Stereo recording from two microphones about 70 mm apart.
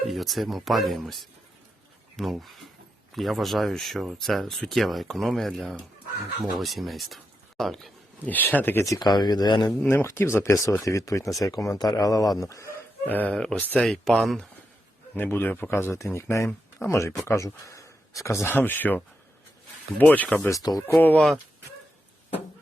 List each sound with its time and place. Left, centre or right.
0.1 s speech: centre
8.3 s speech: left
9.0 s speech: left
9.8 s speech: left
13.1 s speech: left
13.8 s speech: centre
15.1 s speech: left
18.4 s speech: left
20.0 s speech: left
20.5 s speech: left
20.8 s speech: left